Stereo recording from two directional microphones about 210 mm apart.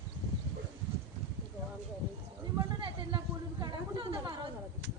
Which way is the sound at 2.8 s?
25° right (ahead or behind).